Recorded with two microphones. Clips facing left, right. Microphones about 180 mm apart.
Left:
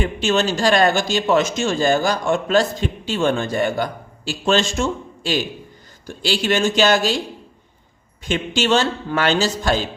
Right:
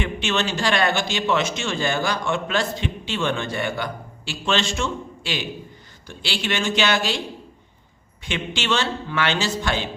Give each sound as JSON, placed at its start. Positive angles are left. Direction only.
{"t": 0.0, "sound": "a man's voice", "side_deg": 40}
{"t": 8.2, "sound": "a man's voice", "side_deg": 40}